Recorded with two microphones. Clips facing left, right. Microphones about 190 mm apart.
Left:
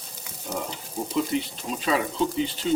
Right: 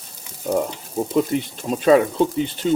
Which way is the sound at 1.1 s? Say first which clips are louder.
Right 5 dB; 50° right (ahead or behind).